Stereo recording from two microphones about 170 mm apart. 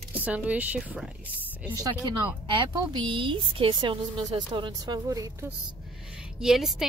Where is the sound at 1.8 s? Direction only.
25° right (ahead or behind).